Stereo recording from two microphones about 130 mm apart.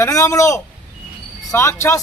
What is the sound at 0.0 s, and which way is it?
A man's voice, 25° left (ahead or behind).